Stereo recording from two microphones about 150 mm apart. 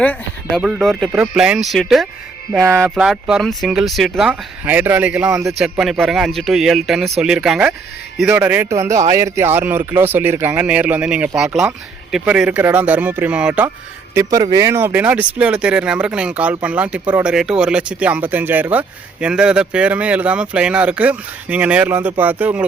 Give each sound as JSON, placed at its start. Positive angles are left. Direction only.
{"t": 0.0, "sound": "a sound", "side_deg": 10}
{"t": 0.6, "sound": "speech", "side_deg": 0}
{"t": 2.5, "sound": "speech", "side_deg": -15}
{"t": 2.9, "sound": "speech", "side_deg": -5}
{"t": 14.1, "sound": "speech", "side_deg": -20}